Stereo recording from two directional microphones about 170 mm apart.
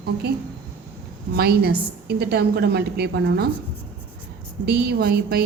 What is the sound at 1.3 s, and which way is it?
A woman's voice, 65° right (ahead or behind).